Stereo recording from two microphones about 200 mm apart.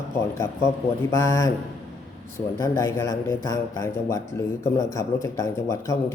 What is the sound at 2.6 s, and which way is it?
A man's voice, 15° left (ahead or behind).